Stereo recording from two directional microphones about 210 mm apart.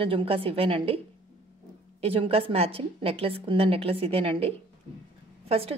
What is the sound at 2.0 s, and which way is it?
A woman's voice, 25° right (ahead or behind).